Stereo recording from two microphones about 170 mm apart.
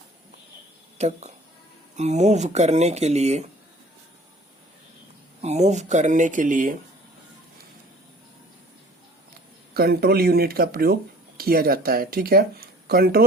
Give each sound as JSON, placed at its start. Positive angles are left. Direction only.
{"t": 0.9, "sound": "speech", "side_deg": -40}
{"t": 5.4, "sound": "speech", "side_deg": -40}
{"t": 9.7, "sound": "speech", "side_deg": -65}